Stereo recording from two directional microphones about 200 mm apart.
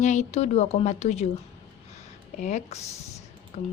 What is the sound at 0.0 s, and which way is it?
Speech, 35° left (ahead or behind).